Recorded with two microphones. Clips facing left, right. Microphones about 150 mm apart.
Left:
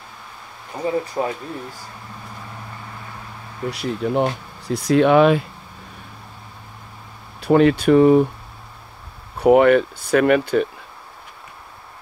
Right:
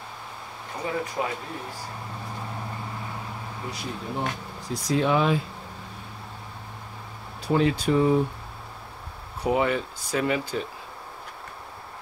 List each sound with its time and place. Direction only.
1.2 s speech: 35° left (ahead or behind)
3.7 s speech: 80° left
4.6 s speech: 65° left (ahead or behind)
7.4 s speech: 65° left (ahead or behind)
9.4 s speech: 65° left (ahead or behind)